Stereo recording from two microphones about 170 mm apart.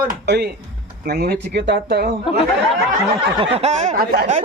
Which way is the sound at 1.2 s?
80° right.